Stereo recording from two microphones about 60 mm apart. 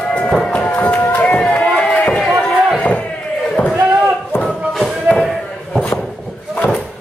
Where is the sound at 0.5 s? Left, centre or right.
Left.